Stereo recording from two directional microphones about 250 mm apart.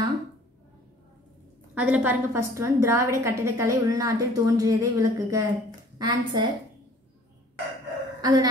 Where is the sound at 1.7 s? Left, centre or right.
Centre.